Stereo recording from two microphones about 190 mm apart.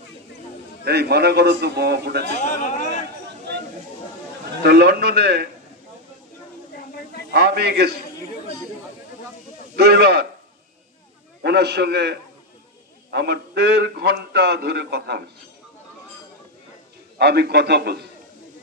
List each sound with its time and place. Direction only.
0.8 s a man's voice: 60° right (ahead or behind)
2.4 s chatter: 40° left (ahead or behind)
4.6 s a man's voice: 55° right (ahead or behind)
7.2 s a man's voice: 60° right (ahead or behind)
9.8 s a man's voice: 60° right (ahead or behind)
11.4 s a man's voice: 60° right (ahead or behind)
17.2 s a man's voice: 60° right (ahead or behind)